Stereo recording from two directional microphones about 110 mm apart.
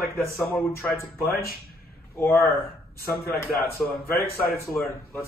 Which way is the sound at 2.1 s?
15° left (ahead or behind).